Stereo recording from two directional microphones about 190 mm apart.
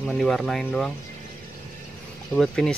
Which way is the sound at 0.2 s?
Centre (ahead or behind).